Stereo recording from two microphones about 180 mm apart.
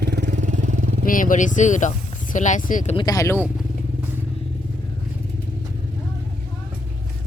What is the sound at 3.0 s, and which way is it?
Speech, 20° left (ahead or behind).